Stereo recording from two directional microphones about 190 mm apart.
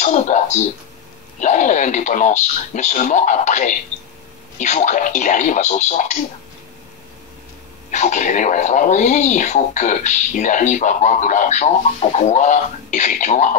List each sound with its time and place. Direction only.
0.0 s speech: 40° left (ahead or behind)
7.9 s speech: 40° left (ahead or behind)